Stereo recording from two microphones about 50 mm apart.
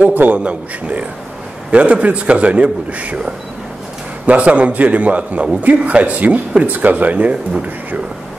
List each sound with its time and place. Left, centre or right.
0.0 s a man's voice: right